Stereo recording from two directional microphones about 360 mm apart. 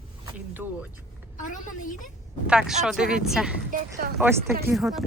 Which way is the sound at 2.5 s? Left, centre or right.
Centre.